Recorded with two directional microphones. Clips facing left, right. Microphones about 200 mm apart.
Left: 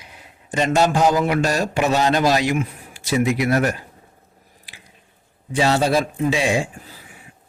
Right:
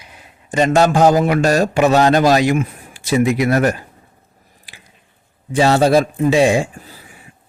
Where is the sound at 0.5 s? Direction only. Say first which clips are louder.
Right 4 dB; 50° right (ahead or behind).